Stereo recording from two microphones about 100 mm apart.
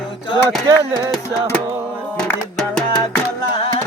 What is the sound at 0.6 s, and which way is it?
Speech, 35° right (ahead or behind).